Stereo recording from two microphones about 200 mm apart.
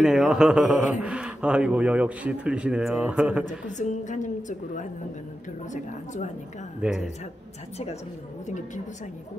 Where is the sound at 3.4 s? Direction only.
35° left (ahead or behind).